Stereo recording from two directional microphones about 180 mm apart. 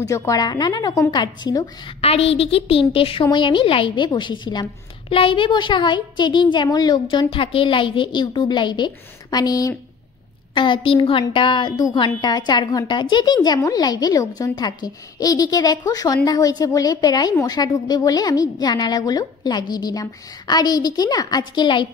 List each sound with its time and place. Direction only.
0.0 s a woman's voice: 15° left (ahead or behind)